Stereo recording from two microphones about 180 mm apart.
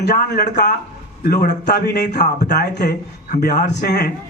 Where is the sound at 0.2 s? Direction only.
60° left (ahead or behind).